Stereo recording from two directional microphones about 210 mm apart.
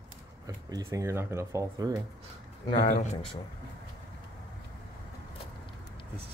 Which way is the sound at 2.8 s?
35° left (ahead or behind).